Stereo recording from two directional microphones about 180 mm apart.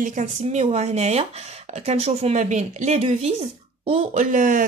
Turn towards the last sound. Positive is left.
turn(degrees=-45)  # may be behind; listen again after turning